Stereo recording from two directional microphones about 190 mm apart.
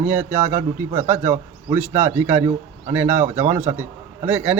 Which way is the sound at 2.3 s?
35° right (ahead or behind).